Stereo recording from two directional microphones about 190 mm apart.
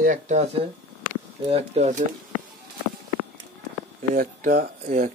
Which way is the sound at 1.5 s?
35° right (ahead or behind).